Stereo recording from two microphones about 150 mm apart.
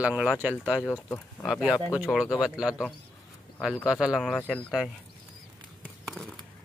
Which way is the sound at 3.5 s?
5° left (ahead or behind).